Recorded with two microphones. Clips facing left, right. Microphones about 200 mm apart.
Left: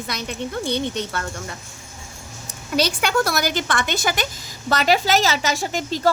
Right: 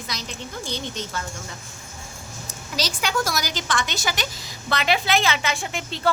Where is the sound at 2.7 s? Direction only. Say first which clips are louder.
Left 6 dB; 60° left (ahead or behind).